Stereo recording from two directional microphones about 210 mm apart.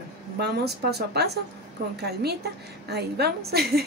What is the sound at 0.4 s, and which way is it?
A woman's voice, 50° right (ahead or behind).